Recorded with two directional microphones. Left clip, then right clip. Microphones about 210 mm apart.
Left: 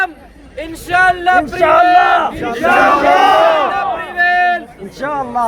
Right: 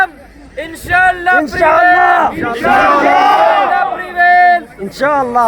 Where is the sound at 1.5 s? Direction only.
35° right (ahead or behind).